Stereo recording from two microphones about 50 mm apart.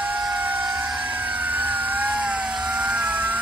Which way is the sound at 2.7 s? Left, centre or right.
Right.